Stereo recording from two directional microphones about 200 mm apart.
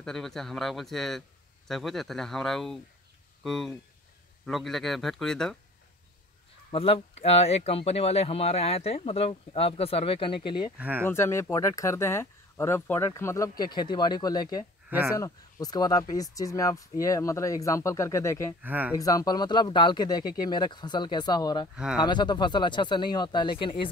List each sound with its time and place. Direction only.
0.0 s a man's voice: centre (ahead or behind)
6.7 s speech: 30° left (ahead or behind)
10.8 s speech: 10° right (ahead or behind)
11.1 s speech: 10° left (ahead or behind)
14.9 s speech: 10° right (ahead or behind)
15.1 s speech: 20° left (ahead or behind)
18.6 s speech: 10° right (ahead or behind)
18.9 s speech: 20° left (ahead or behind)